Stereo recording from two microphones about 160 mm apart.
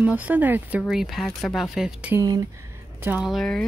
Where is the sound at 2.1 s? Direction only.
20° right (ahead or behind).